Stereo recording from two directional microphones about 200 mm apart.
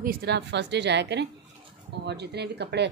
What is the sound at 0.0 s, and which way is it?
Speech, 50° right (ahead or behind).